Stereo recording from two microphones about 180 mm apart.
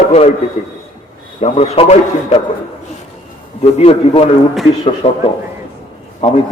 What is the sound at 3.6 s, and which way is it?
A man's voice, 35° left (ahead or behind).